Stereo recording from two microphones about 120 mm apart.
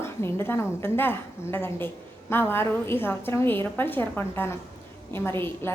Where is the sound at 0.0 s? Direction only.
20° left (ahead or behind).